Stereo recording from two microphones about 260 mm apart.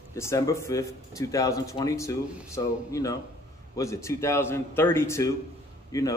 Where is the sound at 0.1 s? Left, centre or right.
Centre.